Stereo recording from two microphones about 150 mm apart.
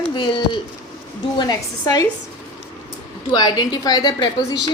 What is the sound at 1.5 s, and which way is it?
Speech, 25° left (ahead or behind).